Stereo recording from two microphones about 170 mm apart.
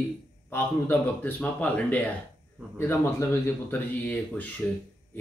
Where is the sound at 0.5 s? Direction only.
10° left (ahead or behind).